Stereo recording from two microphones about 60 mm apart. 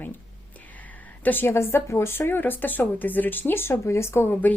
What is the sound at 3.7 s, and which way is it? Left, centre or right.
Speech, left.